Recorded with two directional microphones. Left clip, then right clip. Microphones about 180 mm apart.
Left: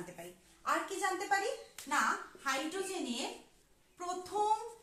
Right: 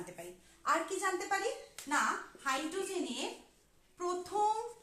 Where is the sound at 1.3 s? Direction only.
20° right (ahead or behind).